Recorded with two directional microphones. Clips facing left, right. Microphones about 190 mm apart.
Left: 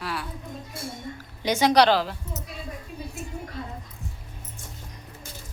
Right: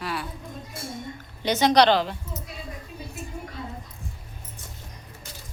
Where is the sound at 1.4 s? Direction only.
10° left (ahead or behind).